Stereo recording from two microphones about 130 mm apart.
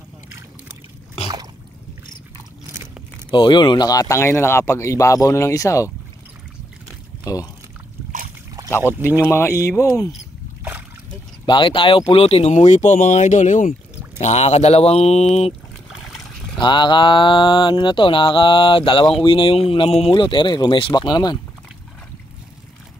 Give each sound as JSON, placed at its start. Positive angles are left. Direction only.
{"t": 3.3, "sound": "speech", "side_deg": 35}
{"t": 7.3, "sound": "speech", "side_deg": 25}
{"t": 8.6, "sound": "boat", "side_deg": -30}
{"t": 9.2, "sound": "speech", "side_deg": 20}
{"t": 11.4, "sound": "speech", "side_deg": 40}
{"t": 14.2, "sound": "speech", "side_deg": 55}
{"t": 16.5, "sound": "speech", "side_deg": 35}